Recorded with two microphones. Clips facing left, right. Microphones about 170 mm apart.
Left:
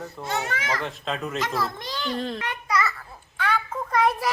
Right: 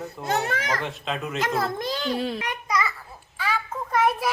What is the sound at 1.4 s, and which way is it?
Speech, 50° right (ahead or behind).